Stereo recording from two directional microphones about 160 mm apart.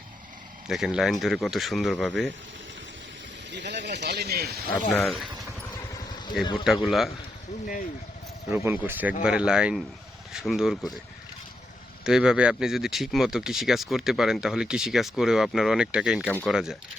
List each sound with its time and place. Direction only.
0.7 s speech: centre (ahead or behind)
3.5 s speech: 90° right
4.7 s speech: 10° left (ahead or behind)
6.4 s speech: 30° left (ahead or behind)
6.7 s speech: centre (ahead or behind)
8.5 s speech: 15° right (ahead or behind)
12.0 s speech: 5° right (ahead or behind)